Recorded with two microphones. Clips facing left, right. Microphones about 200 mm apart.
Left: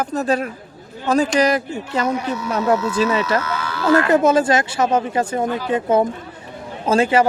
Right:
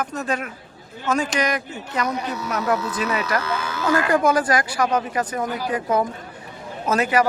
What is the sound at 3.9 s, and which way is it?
Speech, 25° left (ahead or behind).